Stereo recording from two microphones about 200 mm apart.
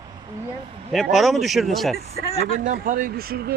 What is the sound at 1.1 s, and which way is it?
Speech, centre (ahead or behind).